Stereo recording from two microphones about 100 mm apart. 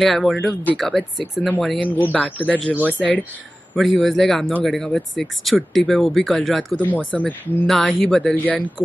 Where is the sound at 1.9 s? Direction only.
15° left (ahead or behind).